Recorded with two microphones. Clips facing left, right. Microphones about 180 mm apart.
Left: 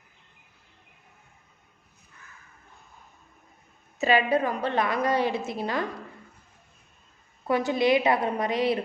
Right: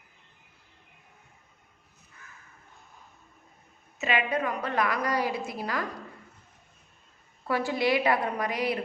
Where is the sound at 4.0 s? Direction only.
35° left (ahead or behind).